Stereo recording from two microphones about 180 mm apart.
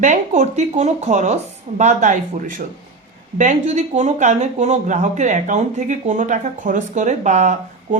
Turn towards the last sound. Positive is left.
turn(degrees=-40)  # may be behind; listen again after turning